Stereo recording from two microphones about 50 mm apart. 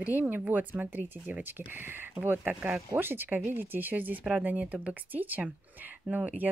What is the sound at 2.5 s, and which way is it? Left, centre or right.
Speech, right.